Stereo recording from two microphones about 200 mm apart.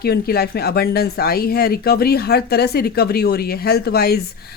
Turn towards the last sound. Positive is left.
turn(degrees=50)  # may be behind; listen again after turning